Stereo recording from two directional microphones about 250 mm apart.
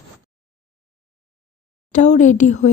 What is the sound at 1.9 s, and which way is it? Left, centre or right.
Speech, left.